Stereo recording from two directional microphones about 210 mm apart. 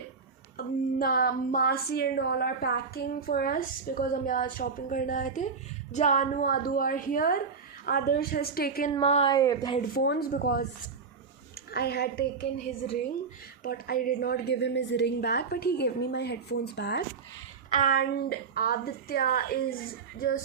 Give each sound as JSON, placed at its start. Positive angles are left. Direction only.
{"t": 0.5, "sound": "a woman's voice", "side_deg": 45}
{"t": 8.9, "sound": "a woman's voice", "side_deg": 30}
{"t": 9.3, "sound": "a woman's voice", "side_deg": 15}
{"t": 9.9, "sound": "a woman's voice", "side_deg": 50}
{"t": 11.7, "sound": "a woman's voice", "side_deg": 50}
{"t": 13.6, "sound": "a woman's voice", "side_deg": 45}
{"t": 17.7, "sound": "a woman's voice", "side_deg": 35}